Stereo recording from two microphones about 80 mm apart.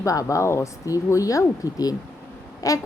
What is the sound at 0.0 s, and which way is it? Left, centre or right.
A woman's voice, left.